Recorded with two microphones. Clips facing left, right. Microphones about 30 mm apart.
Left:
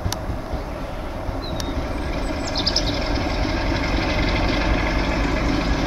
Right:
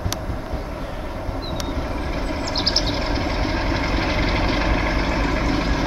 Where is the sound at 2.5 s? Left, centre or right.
Right.